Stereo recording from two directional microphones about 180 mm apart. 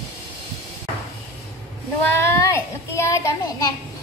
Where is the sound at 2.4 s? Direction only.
15° left (ahead or behind).